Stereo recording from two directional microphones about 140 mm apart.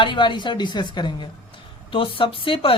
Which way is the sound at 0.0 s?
35° left (ahead or behind).